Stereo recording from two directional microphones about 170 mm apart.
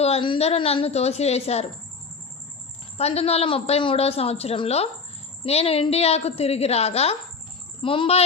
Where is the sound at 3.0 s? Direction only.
35° left (ahead or behind).